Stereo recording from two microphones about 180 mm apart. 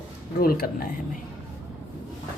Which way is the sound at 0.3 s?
55° left (ahead or behind).